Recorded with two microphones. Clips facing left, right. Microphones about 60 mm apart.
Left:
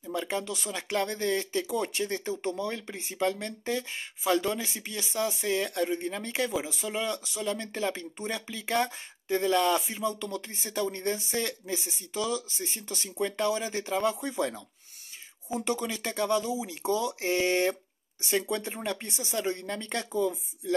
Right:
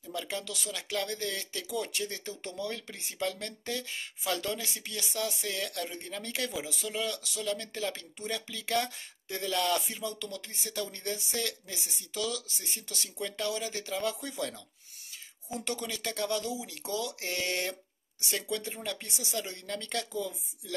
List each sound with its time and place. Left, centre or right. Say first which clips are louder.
0.0 s speech: left 5 dB; left
9.7 s speech: left 4 dB; centre